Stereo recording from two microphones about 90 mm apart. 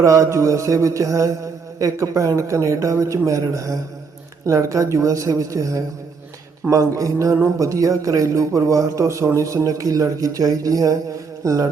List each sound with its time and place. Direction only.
0.0 s a man's voice: 35° right (ahead or behind)